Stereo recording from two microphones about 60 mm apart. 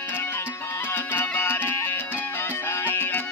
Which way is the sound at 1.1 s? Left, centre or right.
Left.